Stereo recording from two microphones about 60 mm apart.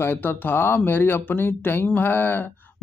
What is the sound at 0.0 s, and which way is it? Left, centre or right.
Speech, left.